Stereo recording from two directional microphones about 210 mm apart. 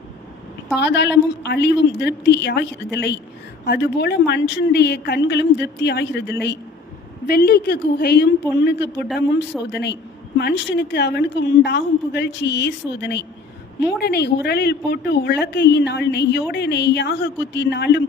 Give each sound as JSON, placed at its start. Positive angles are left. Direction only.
{"t": 0.8, "sound": "a woman's voice", "side_deg": 55}